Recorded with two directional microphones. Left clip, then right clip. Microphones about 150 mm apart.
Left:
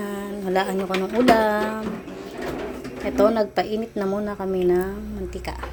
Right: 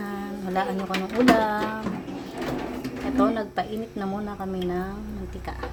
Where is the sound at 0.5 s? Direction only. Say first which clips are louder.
Left 4 dB; 30° left (ahead or behind).